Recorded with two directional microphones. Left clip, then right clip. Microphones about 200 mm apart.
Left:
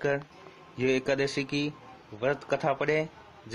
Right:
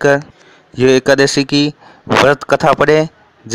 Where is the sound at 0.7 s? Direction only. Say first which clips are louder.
Right 17 dB; 45° right (ahead or behind).